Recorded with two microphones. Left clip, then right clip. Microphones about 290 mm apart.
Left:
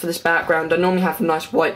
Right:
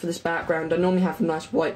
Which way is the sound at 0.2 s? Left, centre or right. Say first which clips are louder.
Left 8 dB; left.